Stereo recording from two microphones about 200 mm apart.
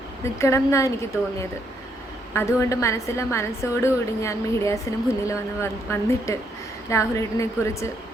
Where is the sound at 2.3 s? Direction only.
10° left (ahead or behind).